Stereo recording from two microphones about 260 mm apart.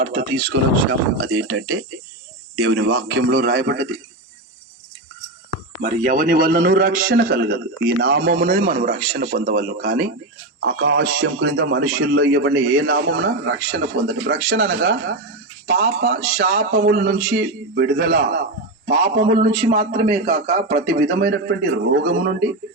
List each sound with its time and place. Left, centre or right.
0.2 s a man's voice: right
5.8 s a man's voice: right